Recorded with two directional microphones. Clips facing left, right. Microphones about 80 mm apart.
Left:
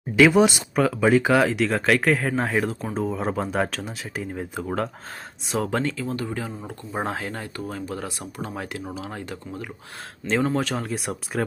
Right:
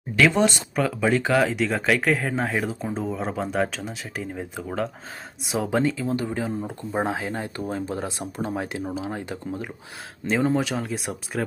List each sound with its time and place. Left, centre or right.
0.2 s speech: centre; by 9.6 s right
10.2 s speech: centre